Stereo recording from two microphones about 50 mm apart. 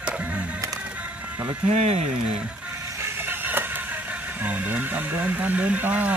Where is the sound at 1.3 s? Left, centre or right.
Right.